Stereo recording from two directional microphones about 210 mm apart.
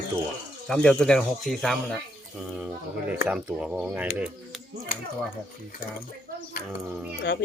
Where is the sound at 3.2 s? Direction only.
5° right (ahead or behind).